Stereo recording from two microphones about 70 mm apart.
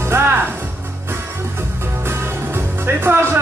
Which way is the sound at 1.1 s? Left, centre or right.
Right.